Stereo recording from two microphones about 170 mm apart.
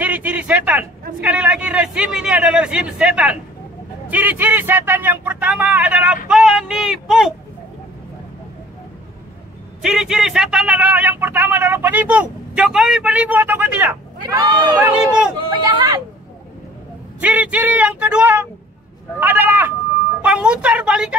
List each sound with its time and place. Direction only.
0.0 s a man's voice: 10° right (ahead or behind)
9.8 s a man's voice: 5° right (ahead or behind)
14.2 s speech: 25° right (ahead or behind)
17.2 s a man's voice: 10° right (ahead or behind)